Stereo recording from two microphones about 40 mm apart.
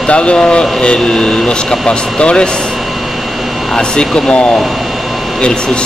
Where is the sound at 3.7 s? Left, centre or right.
Left.